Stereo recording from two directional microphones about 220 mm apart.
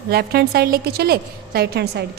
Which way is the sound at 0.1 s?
45° right (ahead or behind).